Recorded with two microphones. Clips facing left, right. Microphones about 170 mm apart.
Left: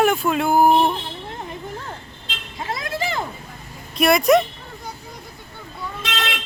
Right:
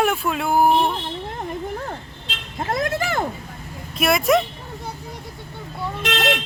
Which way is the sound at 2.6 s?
50° right (ahead or behind).